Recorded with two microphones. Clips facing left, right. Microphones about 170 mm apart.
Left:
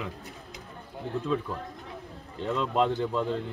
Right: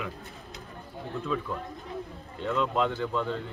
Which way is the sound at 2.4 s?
35° left (ahead or behind).